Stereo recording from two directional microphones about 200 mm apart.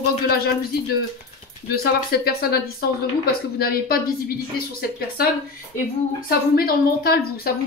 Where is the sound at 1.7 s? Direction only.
50° left (ahead or behind).